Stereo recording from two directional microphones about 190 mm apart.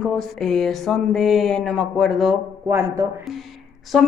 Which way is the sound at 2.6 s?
15° right (ahead or behind).